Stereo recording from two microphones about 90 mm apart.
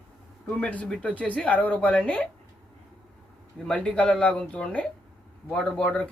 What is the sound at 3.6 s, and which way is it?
Speech, 10° left (ahead or behind).